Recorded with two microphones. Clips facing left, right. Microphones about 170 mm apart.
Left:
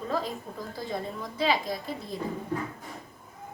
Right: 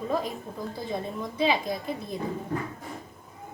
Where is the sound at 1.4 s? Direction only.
20° right (ahead or behind).